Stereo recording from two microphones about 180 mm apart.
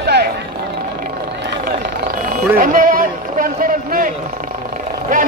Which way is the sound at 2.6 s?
50° right (ahead or behind).